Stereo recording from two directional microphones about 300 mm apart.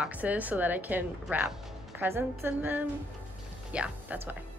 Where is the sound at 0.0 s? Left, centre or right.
Centre.